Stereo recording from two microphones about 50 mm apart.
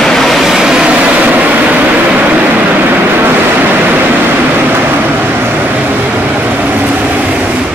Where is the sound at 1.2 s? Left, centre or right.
Right.